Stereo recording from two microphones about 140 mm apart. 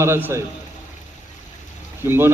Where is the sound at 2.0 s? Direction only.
15° right (ahead or behind).